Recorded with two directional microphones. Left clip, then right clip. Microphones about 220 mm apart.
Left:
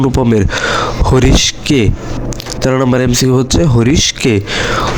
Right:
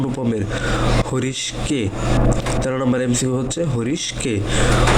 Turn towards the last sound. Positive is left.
turn(degrees=50)  # may be behind; listen again after turning